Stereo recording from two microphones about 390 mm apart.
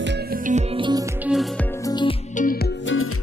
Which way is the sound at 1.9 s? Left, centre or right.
Centre.